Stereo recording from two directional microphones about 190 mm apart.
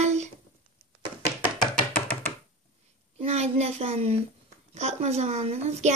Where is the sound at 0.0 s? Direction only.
35° right (ahead or behind).